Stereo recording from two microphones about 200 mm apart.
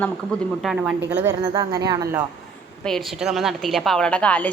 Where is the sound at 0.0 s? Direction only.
Centre (ahead or behind); by 2.2 s 20° right (ahead or behind).